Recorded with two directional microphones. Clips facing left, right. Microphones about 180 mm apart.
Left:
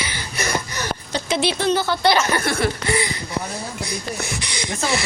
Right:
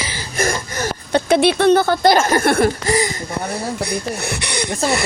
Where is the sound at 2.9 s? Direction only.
40° right (ahead or behind).